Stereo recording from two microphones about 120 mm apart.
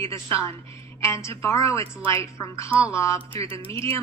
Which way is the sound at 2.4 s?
25° left (ahead or behind).